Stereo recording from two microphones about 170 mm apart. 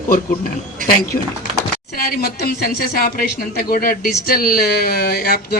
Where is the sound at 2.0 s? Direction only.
60° left (ahead or behind).